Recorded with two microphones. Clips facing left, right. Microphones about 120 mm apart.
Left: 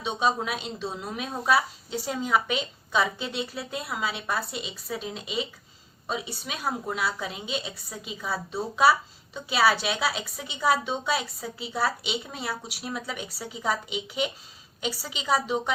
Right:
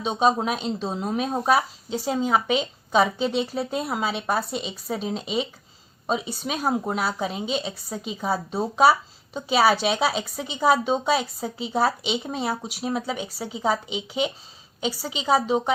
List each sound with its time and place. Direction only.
0.0 s a woman's voice: 35° right (ahead or behind)